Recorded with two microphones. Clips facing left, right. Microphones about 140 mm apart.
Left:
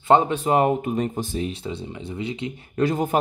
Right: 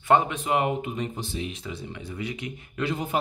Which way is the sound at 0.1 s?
35° left (ahead or behind).